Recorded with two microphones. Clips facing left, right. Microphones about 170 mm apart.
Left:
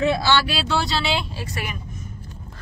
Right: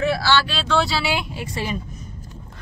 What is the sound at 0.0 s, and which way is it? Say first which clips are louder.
Speech: even; 20° left (ahead or behind).